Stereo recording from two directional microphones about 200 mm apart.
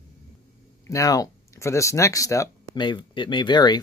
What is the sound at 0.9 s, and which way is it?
Speech, 15° left (ahead or behind).